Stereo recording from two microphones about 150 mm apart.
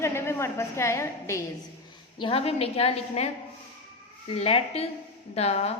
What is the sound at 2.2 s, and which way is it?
A woman's voice, 40° left (ahead or behind).